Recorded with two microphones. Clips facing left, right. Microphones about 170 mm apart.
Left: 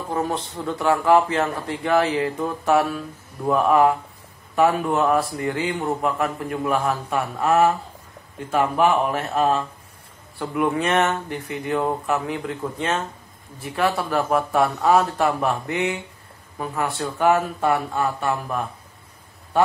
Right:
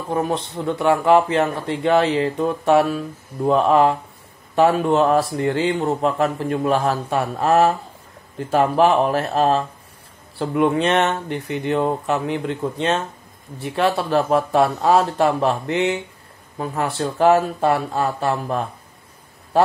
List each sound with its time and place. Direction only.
0.1 s a man's voice: 20° right (ahead or behind)